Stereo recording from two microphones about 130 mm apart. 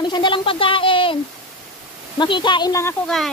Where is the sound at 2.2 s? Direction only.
35° left (ahead or behind).